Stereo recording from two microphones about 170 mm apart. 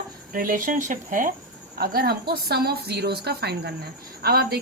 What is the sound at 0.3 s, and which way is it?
Speech, 55° right (ahead or behind).